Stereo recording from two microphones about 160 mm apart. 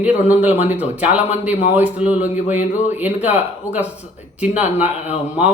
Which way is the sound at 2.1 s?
45° left (ahead or behind).